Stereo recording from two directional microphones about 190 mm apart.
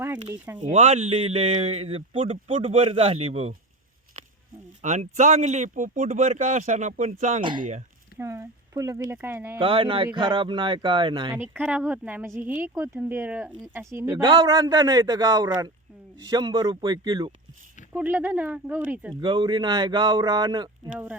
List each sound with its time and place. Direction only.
0.3 s speech: 10° right (ahead or behind)
0.6 s speech: 35° right (ahead or behind)
4.8 s speech: 40° right (ahead or behind)
8.2 s speech: 15° right (ahead or behind)
9.6 s speech: 30° right (ahead or behind)
11.3 s speech: 10° right (ahead or behind)
17.9 s speech: 10° right (ahead or behind)
19.2 s speech: 25° right (ahead or behind)